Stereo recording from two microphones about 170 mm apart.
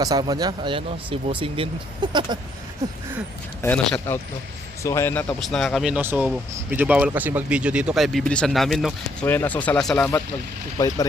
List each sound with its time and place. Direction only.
0.0 s speech: 25° right (ahead or behind)
3.6 s speech: 10° left (ahead or behind)
5.4 s speech: centre (ahead or behind)
6.2 s speech: centre (ahead or behind)
9.2 s speech: 10° left (ahead or behind)
10.8 s speech: 20° left (ahead or behind)